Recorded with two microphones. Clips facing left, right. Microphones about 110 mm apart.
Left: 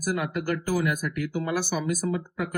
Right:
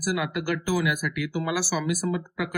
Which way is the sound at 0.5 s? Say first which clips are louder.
Right 1 dB; 40° left (ahead or behind).